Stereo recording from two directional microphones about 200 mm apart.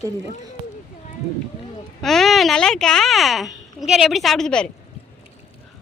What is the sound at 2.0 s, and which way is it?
A woman's voice, centre (ahead or behind).